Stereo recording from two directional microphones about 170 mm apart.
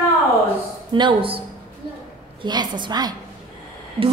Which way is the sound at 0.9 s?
30° right (ahead or behind).